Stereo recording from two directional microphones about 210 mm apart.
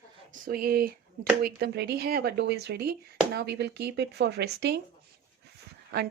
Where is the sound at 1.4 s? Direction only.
50° right (ahead or behind).